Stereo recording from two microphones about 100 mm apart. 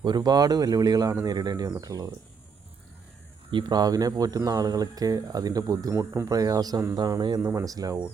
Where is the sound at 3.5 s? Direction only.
45° right (ahead or behind).